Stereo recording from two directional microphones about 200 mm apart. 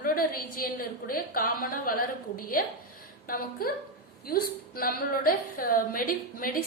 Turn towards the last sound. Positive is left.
turn(degrees=45)  # may be behind; listen again after turning